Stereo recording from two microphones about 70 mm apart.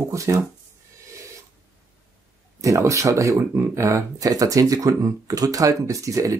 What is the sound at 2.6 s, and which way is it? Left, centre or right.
Speech, right.